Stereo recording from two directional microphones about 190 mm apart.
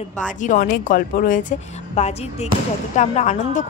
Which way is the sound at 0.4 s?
45° left (ahead or behind).